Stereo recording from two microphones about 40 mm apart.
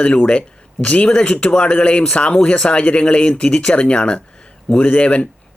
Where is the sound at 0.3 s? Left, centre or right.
Left.